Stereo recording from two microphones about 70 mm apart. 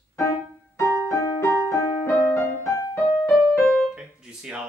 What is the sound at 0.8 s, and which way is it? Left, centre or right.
Music, left.